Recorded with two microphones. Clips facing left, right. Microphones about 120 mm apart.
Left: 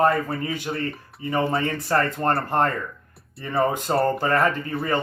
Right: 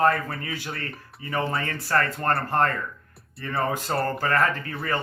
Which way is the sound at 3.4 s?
20° left (ahead or behind).